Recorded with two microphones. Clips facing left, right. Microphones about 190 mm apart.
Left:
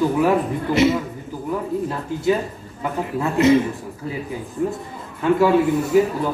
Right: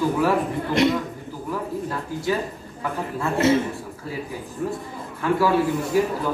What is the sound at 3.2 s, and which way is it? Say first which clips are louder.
Speech: left 4 dB; 15° left (ahead or behind).